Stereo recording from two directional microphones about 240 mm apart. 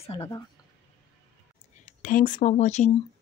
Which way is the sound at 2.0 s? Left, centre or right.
Left.